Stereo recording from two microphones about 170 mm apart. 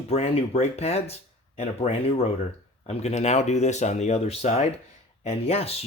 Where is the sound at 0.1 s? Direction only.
40° left (ahead or behind).